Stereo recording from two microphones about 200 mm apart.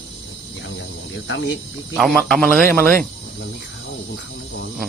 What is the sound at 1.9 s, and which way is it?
Speech, centre (ahead or behind).